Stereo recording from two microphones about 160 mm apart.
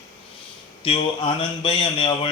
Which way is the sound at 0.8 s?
35° left (ahead or behind).